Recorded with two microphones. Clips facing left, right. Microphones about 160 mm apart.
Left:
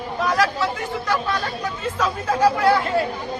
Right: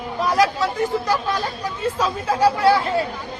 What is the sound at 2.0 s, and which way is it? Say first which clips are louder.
Speech: even; 30° right (ahead or behind).